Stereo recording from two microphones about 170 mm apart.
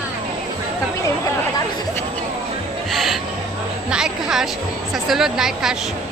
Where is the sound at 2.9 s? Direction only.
Centre (ahead or behind).